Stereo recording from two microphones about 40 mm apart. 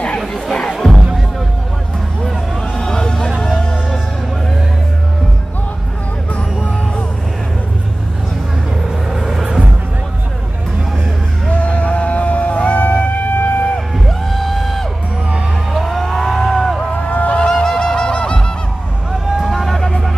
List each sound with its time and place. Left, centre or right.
0.5 s music: centre
0.7 s music: centre
2.8 s music: centre
3.3 s music: centre
11.4 s music: left
14.0 s music: centre
15.7 s cattle: centre
17.1 s a sound: left
17.5 s music: centre
19.2 s a sound: centre
19.5 s music: centre